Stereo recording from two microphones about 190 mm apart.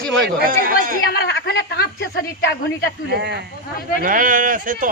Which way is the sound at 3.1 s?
60° right (ahead or behind).